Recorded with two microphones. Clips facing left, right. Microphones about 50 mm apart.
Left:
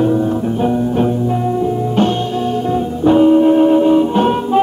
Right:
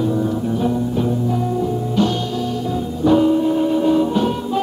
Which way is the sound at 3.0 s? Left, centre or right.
Left.